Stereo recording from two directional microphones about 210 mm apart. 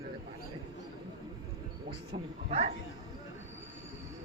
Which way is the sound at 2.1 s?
30° right (ahead or behind).